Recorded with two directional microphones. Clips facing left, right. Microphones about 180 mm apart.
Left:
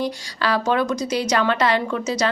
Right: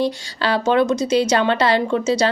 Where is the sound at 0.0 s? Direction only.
25° right (ahead or behind).